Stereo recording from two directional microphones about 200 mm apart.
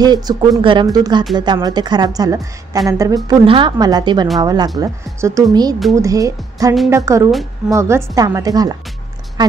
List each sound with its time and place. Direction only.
0.0 s a woman's voice: 20° right (ahead or behind)